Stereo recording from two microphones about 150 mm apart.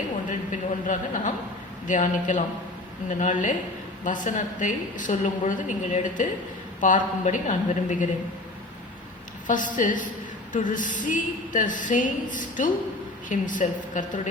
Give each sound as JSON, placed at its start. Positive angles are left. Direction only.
{"t": 0.3, "sound": "a sound", "side_deg": 55}
{"t": 1.9, "sound": "a woman's voice", "side_deg": 60}
{"t": 9.5, "sound": "a woman's voice", "side_deg": 60}